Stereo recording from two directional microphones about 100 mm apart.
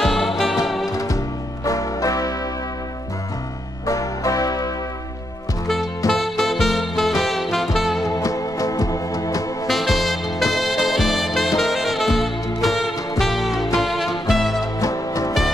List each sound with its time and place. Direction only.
0.0 s music: centre (ahead or behind)
1.6 s music: 35° left (ahead or behind)
3.8 s music: 35° left (ahead or behind)
5.7 s music: centre (ahead or behind)
8.1 s music: 35° left (ahead or behind)
9.7 s music: centre (ahead or behind)
14.8 s music: 35° left (ahead or behind)